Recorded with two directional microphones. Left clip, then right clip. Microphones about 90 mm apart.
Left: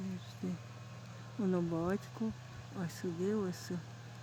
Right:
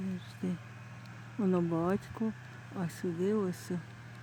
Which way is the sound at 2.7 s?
35° right (ahead or behind).